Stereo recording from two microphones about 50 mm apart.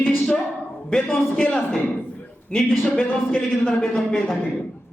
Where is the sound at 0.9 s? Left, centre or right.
Centre.